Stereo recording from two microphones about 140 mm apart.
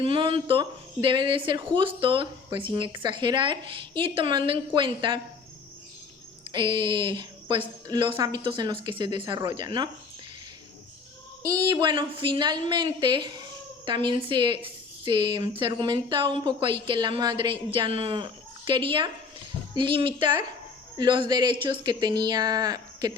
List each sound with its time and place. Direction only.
0.0 s a woman's voice: 40° right (ahead or behind)
6.5 s a woman's voice: 35° right (ahead or behind)
11.4 s a woman's voice: 30° right (ahead or behind)